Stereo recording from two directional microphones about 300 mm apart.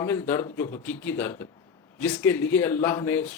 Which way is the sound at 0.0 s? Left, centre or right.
Centre.